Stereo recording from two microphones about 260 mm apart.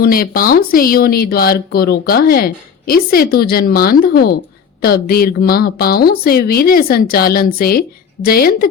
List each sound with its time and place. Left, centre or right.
0.0 s speech: left